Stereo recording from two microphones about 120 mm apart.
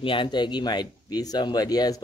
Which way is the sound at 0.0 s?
45° left (ahead or behind).